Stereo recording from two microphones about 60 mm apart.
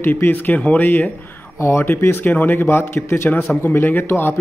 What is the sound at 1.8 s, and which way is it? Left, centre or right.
Speech, left.